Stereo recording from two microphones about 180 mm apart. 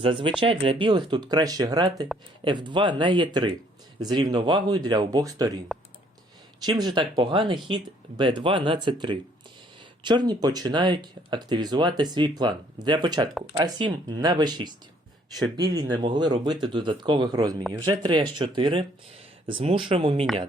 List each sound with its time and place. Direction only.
0.0 s speech: 30° right (ahead or behind)
6.7 s speech: 25° right (ahead or behind)